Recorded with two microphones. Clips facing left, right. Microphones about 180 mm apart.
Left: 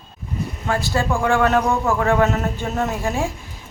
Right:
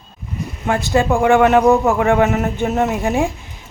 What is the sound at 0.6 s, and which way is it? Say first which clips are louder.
A woman's voice: right 6 dB; 20° right (ahead or behind).